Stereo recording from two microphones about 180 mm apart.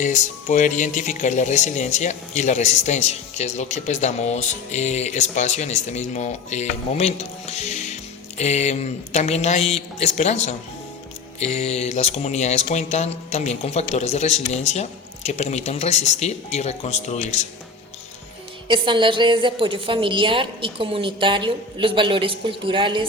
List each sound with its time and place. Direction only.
0.0 s speech: 45° left (ahead or behind)
18.7 s a woman's voice: 25° right (ahead or behind)